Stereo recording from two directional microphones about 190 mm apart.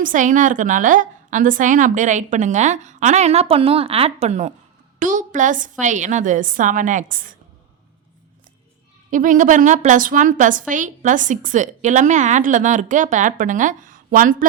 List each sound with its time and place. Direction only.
0.0 s a woman's voice: 45° right (ahead or behind)
9.0 s a woman's voice: 45° right (ahead or behind)